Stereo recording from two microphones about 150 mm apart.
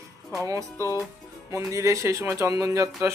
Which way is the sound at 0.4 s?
20° right (ahead or behind).